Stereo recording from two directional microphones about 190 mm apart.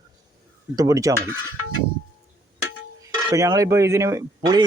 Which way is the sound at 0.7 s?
15° right (ahead or behind).